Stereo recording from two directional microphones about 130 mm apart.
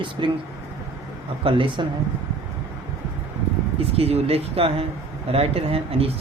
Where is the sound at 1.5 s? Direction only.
40° right (ahead or behind).